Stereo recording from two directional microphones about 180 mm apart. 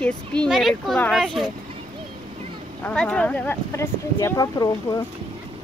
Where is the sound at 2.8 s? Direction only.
5° left (ahead or behind).